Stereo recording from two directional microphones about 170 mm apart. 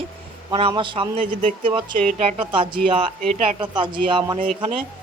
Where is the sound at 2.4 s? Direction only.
30° right (ahead or behind).